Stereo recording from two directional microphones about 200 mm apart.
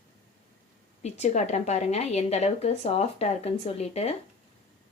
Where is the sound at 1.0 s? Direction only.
35° left (ahead or behind).